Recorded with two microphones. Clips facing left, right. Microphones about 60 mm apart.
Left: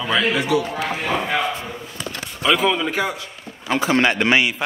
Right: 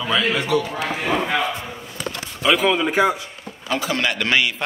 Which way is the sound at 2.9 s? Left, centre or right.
Right.